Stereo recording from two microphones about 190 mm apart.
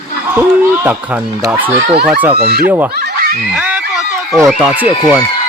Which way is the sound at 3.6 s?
10° right (ahead or behind).